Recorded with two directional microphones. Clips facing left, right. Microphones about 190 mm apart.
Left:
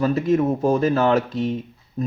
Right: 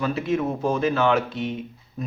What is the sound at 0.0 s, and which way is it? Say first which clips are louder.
Speech: left 5 dB; 45° left (ahead or behind).